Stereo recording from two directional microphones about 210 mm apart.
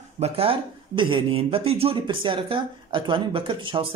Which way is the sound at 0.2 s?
25° right (ahead or behind).